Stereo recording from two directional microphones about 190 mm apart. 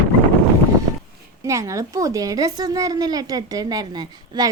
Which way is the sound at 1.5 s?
15° right (ahead or behind).